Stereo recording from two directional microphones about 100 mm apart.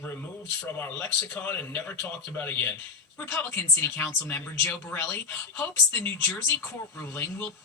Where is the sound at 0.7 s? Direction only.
20° left (ahead or behind).